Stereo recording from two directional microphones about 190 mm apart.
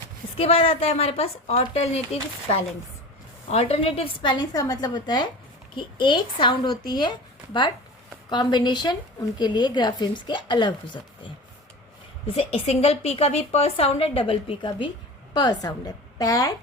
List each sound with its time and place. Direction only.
0.3 s a woman's voice: 30° left (ahead or behind)
3.5 s speech: 35° left (ahead or behind)
12.3 s a woman's voice: 30° left (ahead or behind)